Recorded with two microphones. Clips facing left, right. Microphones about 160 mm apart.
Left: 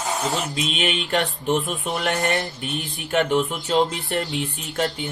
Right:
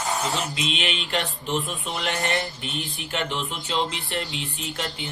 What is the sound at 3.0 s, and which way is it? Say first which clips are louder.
Speech: left 10 dB; 45° left (ahead or behind).